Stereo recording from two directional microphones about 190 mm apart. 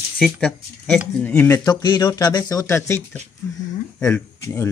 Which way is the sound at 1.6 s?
20° left (ahead or behind).